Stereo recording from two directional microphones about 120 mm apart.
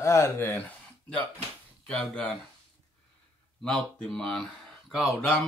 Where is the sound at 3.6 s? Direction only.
5° left (ahead or behind).